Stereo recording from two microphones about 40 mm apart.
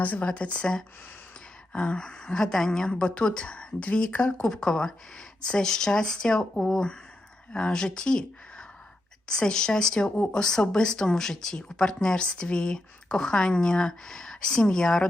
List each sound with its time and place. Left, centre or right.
0.0 s speech: left
0.3 s speech: left
1.7 s speech: left